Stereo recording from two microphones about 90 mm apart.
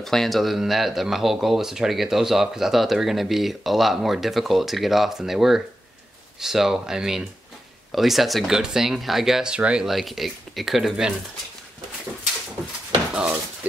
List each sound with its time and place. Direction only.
0.0 s speech: 5° left (ahead or behind)
13.1 s dishes: 10° right (ahead or behind)